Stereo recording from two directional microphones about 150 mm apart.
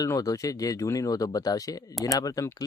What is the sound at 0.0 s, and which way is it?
Speech, 20° left (ahead or behind).